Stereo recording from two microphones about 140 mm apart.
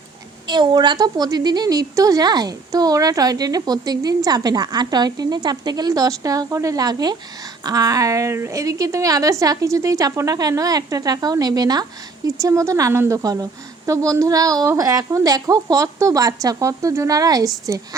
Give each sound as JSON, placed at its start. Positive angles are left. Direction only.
{"t": 0.4, "sound": "a woman's voice", "side_deg": -30}